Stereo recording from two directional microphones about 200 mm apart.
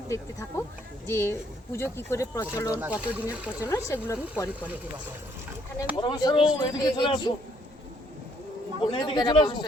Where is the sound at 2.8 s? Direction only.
5° right (ahead or behind).